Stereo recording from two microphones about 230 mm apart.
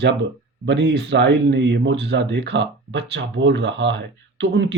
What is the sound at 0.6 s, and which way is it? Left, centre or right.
Speech, right.